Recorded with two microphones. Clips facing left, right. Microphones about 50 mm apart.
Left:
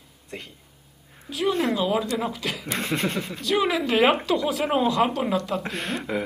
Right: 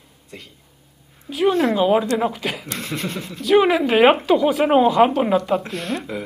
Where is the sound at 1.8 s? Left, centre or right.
Right.